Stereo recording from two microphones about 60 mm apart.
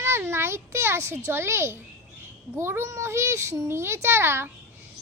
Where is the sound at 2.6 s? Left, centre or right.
Right.